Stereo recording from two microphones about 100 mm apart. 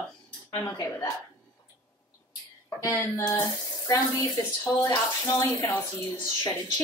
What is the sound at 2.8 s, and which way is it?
Speech, 30° left (ahead or behind).